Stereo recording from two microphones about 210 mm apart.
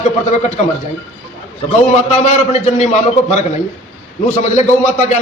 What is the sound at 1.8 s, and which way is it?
A woman's voice, 35° left (ahead or behind).